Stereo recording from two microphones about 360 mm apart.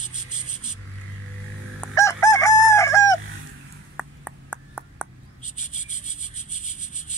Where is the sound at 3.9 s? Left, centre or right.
Centre.